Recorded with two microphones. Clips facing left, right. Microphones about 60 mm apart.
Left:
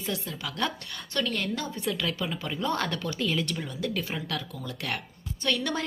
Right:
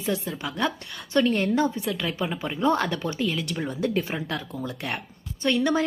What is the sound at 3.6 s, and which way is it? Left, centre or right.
Speech, right.